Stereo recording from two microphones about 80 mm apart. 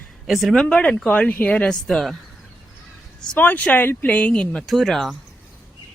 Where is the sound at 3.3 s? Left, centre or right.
Left; by 5.0 s centre.